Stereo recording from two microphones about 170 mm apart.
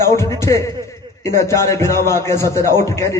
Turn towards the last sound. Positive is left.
turn(degrees=15)  # may be behind; listen again after turning